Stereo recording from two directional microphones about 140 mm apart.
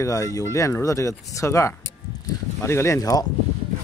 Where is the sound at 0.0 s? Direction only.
25° left (ahead or behind).